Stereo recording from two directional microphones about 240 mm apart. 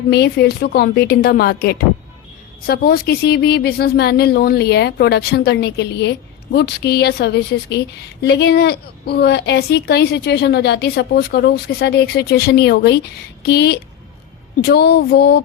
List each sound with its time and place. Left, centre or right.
0.1 s a woman's voice: left